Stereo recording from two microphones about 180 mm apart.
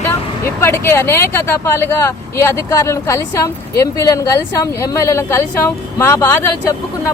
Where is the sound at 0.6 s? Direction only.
15° left (ahead or behind).